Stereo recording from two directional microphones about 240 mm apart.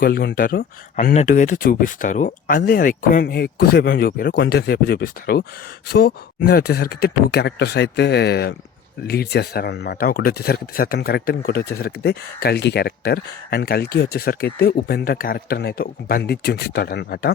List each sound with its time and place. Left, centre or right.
0.0 s speech: left